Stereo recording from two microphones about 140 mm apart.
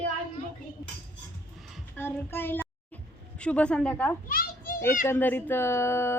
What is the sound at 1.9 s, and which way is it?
Child singing, 15° left (ahead or behind).